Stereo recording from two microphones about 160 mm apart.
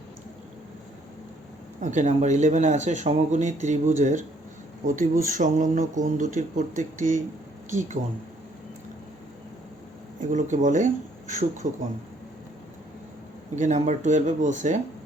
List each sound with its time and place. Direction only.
1.8 s speech: 50° right (ahead or behind)
10.2 s speech: 50° right (ahead or behind)
13.6 s speech: 45° right (ahead or behind)